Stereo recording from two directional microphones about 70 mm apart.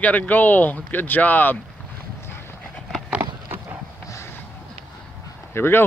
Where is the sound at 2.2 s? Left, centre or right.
Left.